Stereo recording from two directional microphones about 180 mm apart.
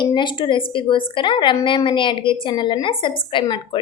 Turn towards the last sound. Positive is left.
turn(degrees=25)  # may be behind; listen again after turning